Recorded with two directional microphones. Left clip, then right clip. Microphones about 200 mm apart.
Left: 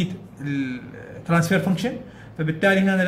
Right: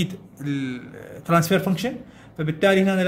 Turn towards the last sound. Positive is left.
turn(degrees=-45)  # may be behind; listen again after turning